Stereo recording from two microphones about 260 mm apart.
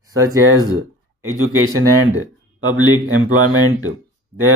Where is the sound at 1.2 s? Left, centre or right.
Right.